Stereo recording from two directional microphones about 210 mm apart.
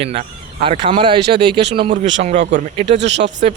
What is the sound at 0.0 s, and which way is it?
Speech, 30° right (ahead or behind).